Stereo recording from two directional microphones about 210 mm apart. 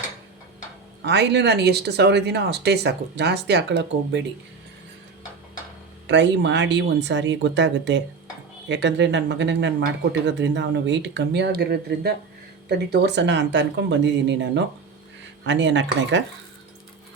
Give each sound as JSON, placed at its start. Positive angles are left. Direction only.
{"t": 1.0, "sound": "speech", "side_deg": -55}
{"t": 6.1, "sound": "speech", "side_deg": -55}